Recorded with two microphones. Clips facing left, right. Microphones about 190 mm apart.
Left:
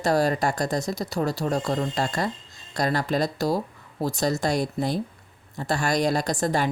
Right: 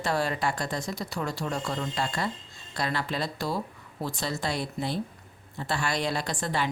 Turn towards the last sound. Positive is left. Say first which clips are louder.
# left 6 dB
turn(degrees=40)  # may be behind; listen again after turning